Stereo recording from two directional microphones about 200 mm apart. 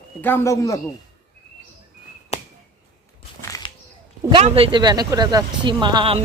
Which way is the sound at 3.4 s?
15° left (ahead or behind).